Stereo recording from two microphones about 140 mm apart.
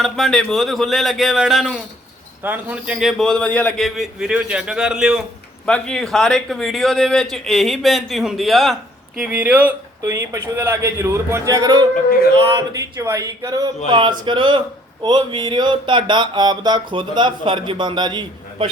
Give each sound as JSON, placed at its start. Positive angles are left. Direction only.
{"t": 0.0, "sound": "a man's voice", "side_deg": 0}
{"t": 2.4, "sound": "a man's voice", "side_deg": -10}
{"t": 5.6, "sound": "a man's voice", "side_deg": 5}
{"t": 10.0, "sound": "speech", "side_deg": -20}